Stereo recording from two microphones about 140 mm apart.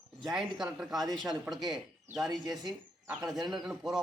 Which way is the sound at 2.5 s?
Centre (ahead or behind).